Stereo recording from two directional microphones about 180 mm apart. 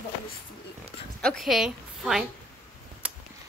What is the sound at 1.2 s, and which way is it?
Speech, centre (ahead or behind).